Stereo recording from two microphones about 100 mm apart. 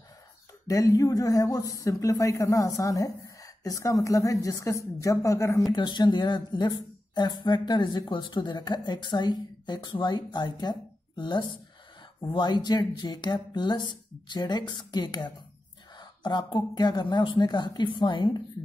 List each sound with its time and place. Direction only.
0.7 s speech: 35° left (ahead or behind)
5.7 s speech: 45° left (ahead or behind)